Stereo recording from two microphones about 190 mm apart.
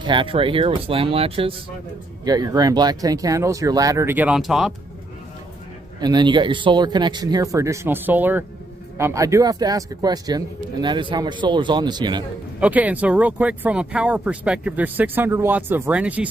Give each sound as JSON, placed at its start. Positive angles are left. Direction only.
{"t": 0.0, "sound": "speech", "side_deg": -25}
{"t": 5.9, "sound": "speech", "side_deg": -20}
{"t": 12.5, "sound": "speech", "side_deg": -10}